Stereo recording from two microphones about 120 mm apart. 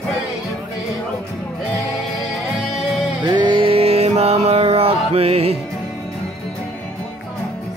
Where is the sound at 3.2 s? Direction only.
40° right (ahead or behind); by 5.5 s 55° right (ahead or behind).